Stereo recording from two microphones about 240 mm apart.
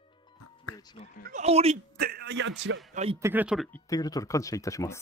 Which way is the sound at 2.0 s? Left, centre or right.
Right.